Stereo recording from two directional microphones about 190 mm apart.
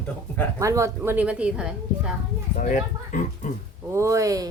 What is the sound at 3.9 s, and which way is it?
Speech, 15° right (ahead or behind).